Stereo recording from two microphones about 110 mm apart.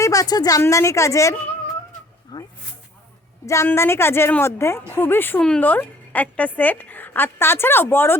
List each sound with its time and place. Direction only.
0.0 s a woman's voice: 30° left (ahead or behind)
2.3 s speech: 40° left (ahead or behind)
3.4 s a woman's voice: 30° left (ahead or behind)